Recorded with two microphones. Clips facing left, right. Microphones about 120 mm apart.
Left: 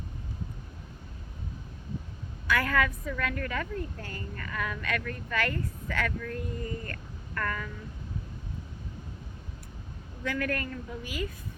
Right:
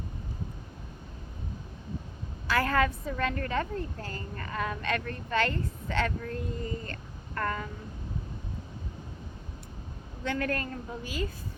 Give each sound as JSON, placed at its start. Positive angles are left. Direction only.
{"t": 2.5, "sound": "a woman's voice", "side_deg": -30}
{"t": 10.2, "sound": "a woman's voice", "side_deg": -30}